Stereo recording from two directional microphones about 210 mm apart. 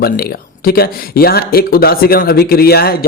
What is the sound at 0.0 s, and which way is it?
Speech, 45° left (ahead or behind).